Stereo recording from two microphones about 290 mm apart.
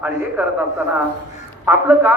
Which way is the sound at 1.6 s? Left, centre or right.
Centre.